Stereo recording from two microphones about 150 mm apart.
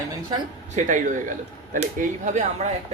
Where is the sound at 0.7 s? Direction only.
60° right (ahead or behind).